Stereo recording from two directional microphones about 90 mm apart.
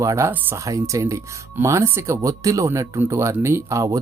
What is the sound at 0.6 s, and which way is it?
Speech, 35° right (ahead or behind).